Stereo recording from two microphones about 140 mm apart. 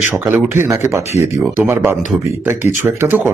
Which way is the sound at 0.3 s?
15° right (ahead or behind).